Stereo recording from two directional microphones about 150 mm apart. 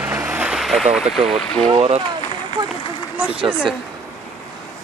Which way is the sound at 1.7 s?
40° right (ahead or behind).